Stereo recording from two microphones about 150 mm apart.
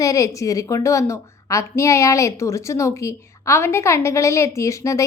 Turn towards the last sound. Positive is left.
turn(degrees=20)  # may be behind; listen again after turning